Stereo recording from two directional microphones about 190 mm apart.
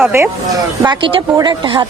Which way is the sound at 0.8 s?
25° right (ahead or behind).